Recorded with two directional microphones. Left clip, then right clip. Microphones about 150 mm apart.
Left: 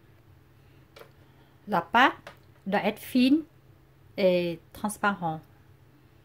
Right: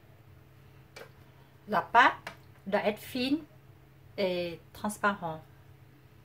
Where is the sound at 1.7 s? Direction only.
55° left (ahead or behind).